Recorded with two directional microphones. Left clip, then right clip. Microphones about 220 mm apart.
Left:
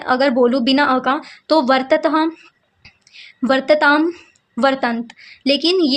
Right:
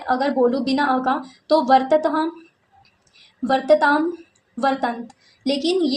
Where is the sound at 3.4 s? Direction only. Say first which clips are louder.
Left 3 dB; 30° left (ahead or behind).